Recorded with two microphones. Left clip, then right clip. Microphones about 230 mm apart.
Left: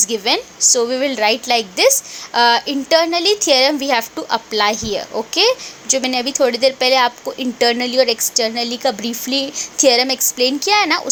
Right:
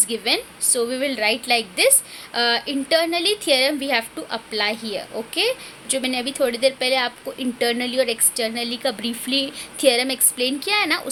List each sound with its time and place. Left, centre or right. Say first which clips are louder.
0.1 s a woman's voice: left 5 dB; centre